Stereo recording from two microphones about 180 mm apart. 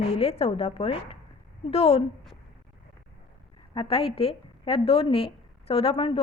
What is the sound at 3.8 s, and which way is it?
A woman's voice, 30° left (ahead or behind).